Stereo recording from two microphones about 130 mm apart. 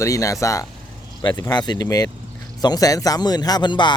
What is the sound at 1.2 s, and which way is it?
Speech, 35° left (ahead or behind).